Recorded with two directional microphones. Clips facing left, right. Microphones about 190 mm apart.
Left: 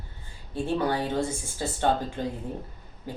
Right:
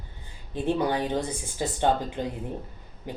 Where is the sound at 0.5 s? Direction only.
20° right (ahead or behind).